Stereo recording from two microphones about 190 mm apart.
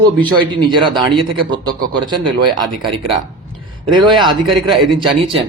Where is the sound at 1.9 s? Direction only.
25° right (ahead or behind).